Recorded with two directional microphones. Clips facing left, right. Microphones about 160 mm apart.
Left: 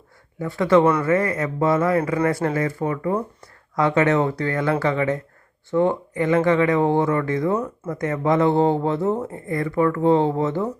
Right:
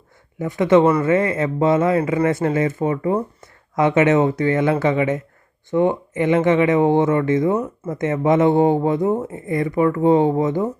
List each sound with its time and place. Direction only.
0.3 s speech: 20° right (ahead or behind)